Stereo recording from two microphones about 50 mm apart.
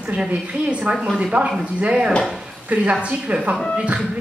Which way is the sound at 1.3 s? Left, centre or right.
Right.